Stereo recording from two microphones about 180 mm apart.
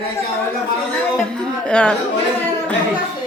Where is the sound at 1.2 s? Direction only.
5° left (ahead or behind).